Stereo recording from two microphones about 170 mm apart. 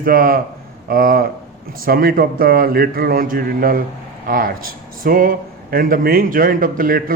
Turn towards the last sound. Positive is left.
turn(degrees=-55)  # may be behind; listen again after turning